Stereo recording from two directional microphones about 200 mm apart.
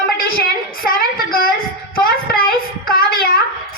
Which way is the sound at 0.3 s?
45° left (ahead or behind).